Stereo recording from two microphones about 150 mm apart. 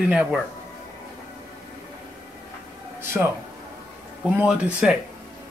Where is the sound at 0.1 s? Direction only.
10° right (ahead or behind).